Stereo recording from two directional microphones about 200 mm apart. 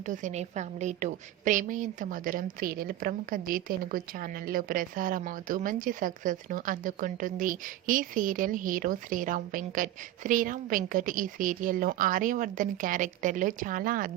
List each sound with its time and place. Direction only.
0.0 s a woman's voice: 40° right (ahead or behind)